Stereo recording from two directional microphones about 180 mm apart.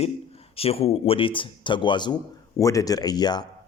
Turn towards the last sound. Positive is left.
turn(degrees=20)  # may be behind; listen again after turning